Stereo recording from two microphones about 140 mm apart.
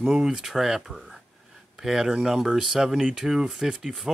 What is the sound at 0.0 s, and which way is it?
Speech, 5° right (ahead or behind).